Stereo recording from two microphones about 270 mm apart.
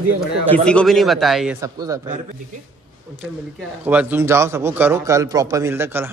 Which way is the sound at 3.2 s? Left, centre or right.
Centre.